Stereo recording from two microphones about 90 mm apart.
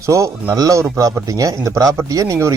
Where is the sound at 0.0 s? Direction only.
35° right (ahead or behind).